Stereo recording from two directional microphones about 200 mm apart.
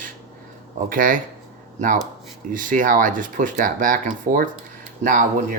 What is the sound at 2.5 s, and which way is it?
Speech, 40° right (ahead or behind).